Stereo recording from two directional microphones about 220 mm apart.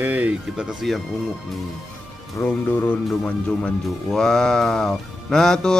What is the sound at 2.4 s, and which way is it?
Speech, 10° left (ahead or behind).